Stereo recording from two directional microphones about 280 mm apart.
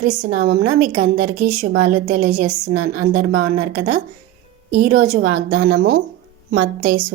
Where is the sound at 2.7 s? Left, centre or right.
Right.